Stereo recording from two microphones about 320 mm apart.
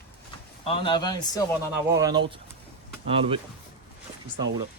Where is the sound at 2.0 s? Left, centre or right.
Centre.